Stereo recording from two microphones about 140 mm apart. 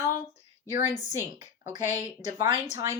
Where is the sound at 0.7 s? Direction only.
55° left (ahead or behind).